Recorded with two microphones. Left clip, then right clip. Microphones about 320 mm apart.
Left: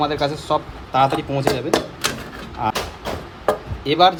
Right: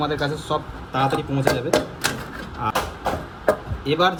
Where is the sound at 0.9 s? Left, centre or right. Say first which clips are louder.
Left 4 dB; centre.